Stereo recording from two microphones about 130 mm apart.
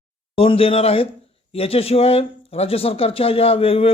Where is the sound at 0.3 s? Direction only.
45° left (ahead or behind).